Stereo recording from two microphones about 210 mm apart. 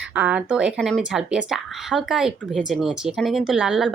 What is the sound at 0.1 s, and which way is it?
Speech, 5° right (ahead or behind).